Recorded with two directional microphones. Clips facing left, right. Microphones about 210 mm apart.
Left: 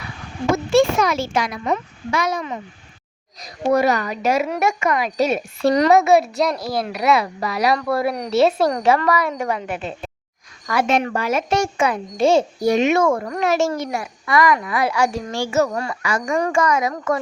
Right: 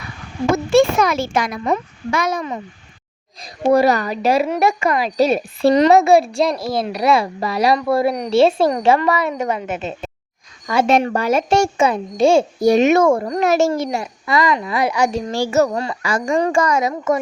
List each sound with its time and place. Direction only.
0.7 s a child's voice: 55° right (ahead or behind)
3.4 s a woman's voice: 30° right (ahead or behind)
10.8 s a woman's voice: 35° right (ahead or behind)
12.2 s a child's voice: 10° right (ahead or behind)
12.5 s a child's voice: 30° right (ahead or behind)
12.8 s a child's voice: 40° right (ahead or behind)
13.1 s a woman's voice: 30° right (ahead or behind)
15.3 s a woman's voice: 35° right (ahead or behind)
15.7 s a woman's voice: 25° right (ahead or behind)